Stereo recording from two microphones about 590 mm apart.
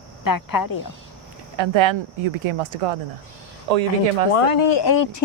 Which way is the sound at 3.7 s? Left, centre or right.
Right.